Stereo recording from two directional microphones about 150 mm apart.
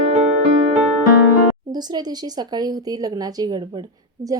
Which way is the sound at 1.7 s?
25° right (ahead or behind).